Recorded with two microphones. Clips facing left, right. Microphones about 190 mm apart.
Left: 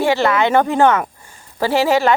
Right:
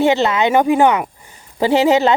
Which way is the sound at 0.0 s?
20° right (ahead or behind).